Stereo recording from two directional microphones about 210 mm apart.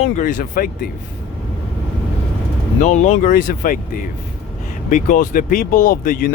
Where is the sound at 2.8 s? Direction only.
35° left (ahead or behind).